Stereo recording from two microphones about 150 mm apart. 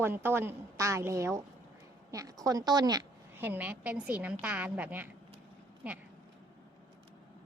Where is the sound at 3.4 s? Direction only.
10° right (ahead or behind).